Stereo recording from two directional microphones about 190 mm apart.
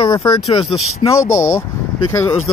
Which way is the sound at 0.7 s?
90° left.